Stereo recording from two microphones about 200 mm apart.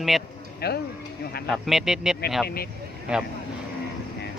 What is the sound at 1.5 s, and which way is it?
Speech, centre (ahead or behind).